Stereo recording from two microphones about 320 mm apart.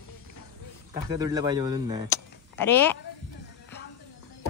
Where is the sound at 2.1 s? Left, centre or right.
Centre.